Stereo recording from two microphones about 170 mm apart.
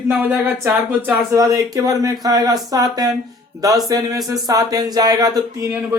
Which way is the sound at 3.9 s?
20° right (ahead or behind).